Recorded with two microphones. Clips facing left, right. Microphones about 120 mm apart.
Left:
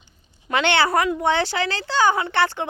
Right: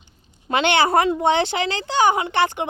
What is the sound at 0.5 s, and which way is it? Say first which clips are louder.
Speech: right 2 dB; 20° right (ahead or behind).